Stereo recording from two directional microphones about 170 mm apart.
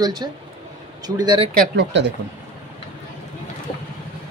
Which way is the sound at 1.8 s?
90° right.